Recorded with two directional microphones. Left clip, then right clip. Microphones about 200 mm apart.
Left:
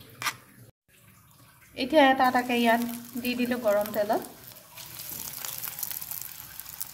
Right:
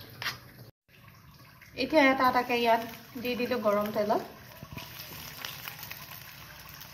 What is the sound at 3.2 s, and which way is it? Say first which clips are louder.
Speech: left 1 dB; 35° left (ahead or behind).